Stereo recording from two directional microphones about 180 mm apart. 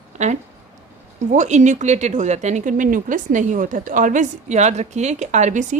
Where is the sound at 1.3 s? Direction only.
40° right (ahead or behind).